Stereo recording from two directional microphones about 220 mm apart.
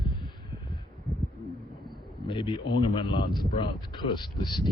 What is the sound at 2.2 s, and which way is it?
A man's voice, 20° left (ahead or behind).